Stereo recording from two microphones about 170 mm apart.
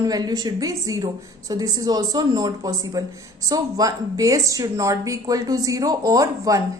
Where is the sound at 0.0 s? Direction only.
20° right (ahead or behind).